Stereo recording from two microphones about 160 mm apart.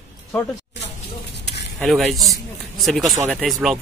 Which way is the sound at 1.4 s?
90° left.